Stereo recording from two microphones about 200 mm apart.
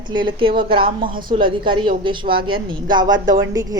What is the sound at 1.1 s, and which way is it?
Speech, 45° right (ahead or behind).